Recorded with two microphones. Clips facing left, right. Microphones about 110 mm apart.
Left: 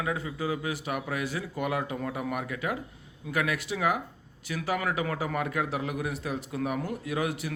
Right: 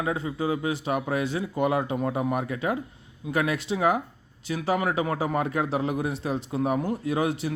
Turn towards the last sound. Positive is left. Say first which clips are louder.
# right 5 dB
turn(degrees=-30)  # may be behind; listen again after turning